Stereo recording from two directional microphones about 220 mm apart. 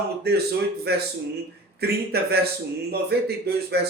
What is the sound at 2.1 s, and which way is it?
A man's voice, 45° right (ahead or behind).